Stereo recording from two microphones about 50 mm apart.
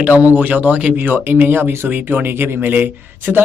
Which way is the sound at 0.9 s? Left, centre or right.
Right.